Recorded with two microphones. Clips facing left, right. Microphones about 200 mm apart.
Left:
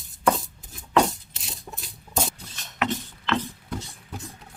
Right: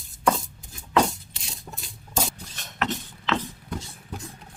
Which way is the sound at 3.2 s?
Centre (ahead or behind).